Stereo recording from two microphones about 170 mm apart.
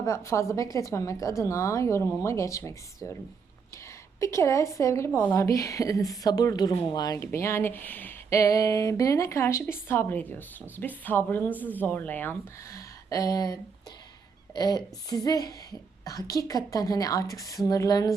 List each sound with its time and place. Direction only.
0.0 s a woman's voice: 15° left (ahead or behind)
4.2 s a woman's voice: 15° left (ahead or behind)